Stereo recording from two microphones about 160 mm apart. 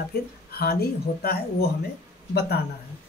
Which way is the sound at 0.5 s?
75° left (ahead or behind).